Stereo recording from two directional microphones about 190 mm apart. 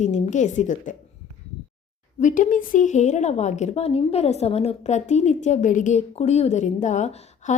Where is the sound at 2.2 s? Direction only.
45° left (ahead or behind).